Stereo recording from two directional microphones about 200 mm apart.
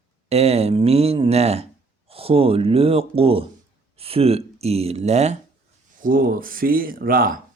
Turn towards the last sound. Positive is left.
turn(degrees=-45)  # may be behind; listen again after turning